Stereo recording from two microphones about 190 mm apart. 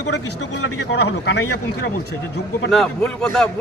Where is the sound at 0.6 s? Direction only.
65° left (ahead or behind).